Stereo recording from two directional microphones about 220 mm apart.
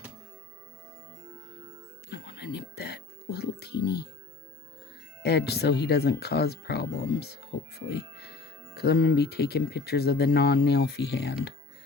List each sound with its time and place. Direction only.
2.0 s music: 50° left (ahead or behind)
5.2 s speech: 50° left (ahead or behind)